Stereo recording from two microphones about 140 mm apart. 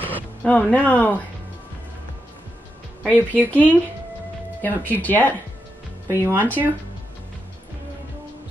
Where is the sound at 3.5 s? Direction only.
10° left (ahead or behind).